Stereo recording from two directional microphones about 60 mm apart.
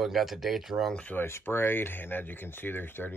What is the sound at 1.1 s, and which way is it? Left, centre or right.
Speech, left.